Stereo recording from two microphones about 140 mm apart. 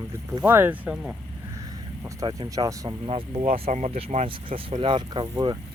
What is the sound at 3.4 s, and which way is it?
Speech, 60° right (ahead or behind).